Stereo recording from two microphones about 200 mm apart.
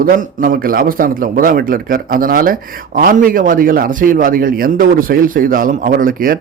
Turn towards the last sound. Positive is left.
turn(degrees=-45)  # may be behind; listen again after turning